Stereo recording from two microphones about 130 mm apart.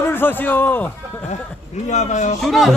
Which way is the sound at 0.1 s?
15° left (ahead or behind).